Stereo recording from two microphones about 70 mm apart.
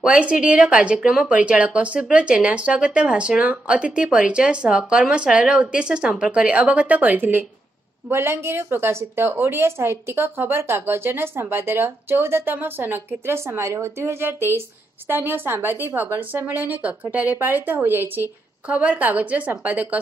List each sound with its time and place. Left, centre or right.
0.0 s a woman's voice: centre
18.7 s a woman's voice: centre